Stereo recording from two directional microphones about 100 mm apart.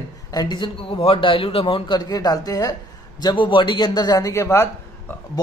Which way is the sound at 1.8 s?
45° left (ahead or behind).